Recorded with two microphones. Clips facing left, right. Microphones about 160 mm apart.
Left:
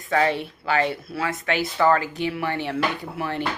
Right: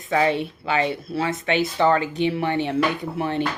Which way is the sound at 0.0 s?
20° right (ahead or behind).